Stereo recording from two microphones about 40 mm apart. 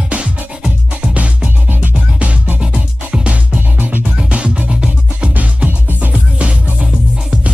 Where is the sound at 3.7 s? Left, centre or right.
Right.